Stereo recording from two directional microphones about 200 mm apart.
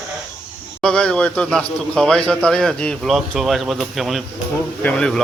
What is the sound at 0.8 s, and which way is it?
Speech, 5° left (ahead or behind).